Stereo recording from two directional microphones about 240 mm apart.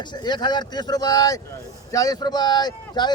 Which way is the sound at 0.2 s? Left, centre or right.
Centre.